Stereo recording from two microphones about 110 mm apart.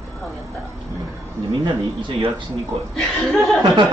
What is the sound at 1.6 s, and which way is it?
Speech, 45° right (ahead or behind).